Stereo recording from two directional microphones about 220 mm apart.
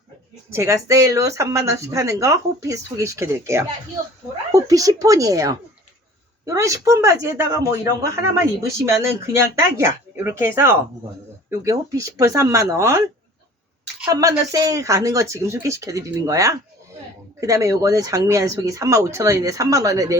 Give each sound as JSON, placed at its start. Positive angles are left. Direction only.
{"t": 0.5, "sound": "speech", "side_deg": -15}
{"t": 14.0, "sound": "speech", "side_deg": -15}